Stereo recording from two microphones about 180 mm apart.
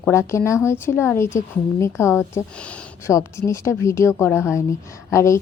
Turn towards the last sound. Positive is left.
turn(degrees=15)  # may be behind; listen again after turning